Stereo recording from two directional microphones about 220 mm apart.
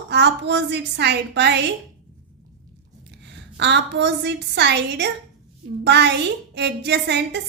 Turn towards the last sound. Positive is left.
turn(degrees=-50)  # may be behind; listen again after turning